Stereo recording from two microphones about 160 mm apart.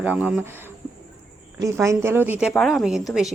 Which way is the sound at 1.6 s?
20° right (ahead or behind).